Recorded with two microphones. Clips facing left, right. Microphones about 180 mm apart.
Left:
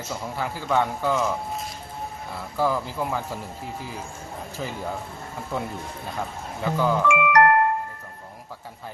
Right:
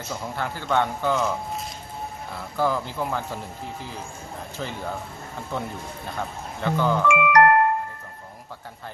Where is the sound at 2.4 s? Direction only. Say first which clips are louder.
Even; centre (ahead or behind).